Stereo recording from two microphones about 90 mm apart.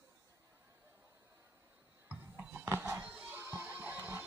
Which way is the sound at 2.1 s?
15° right (ahead or behind).